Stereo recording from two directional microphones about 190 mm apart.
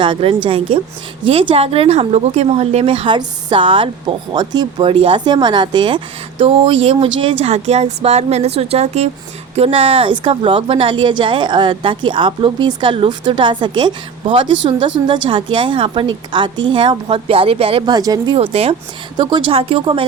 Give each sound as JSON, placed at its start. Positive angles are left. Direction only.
{"t": 0.0, "sound": "speech", "side_deg": -25}
{"t": 7.4, "sound": "speech", "side_deg": -35}
{"t": 18.3, "sound": "speech", "side_deg": -30}